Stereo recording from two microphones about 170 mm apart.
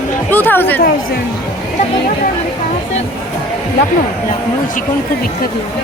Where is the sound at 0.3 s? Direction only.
10° left (ahead or behind).